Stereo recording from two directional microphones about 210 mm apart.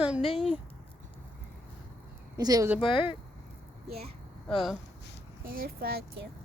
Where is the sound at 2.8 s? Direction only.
25° left (ahead or behind).